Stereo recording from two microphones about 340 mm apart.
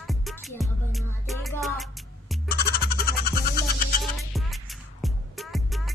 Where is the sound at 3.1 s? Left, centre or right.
Left.